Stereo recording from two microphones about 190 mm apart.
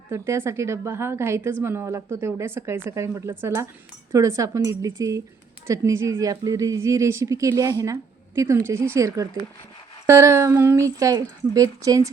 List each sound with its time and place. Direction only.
0.1 s speech: 15° right (ahead or behind)